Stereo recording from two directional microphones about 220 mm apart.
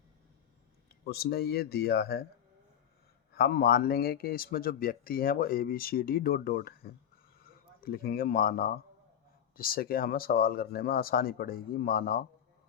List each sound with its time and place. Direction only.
1.0 s speech: 45° left (ahead or behind)
3.3 s speech: 45° left (ahead or behind)